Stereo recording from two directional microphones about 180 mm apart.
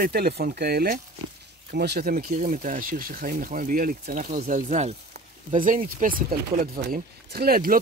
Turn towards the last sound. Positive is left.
turn(degrees=-55)  # may be behind; listen again after turning